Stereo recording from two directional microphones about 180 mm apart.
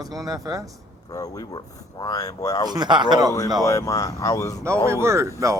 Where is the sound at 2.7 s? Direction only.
25° right (ahead or behind).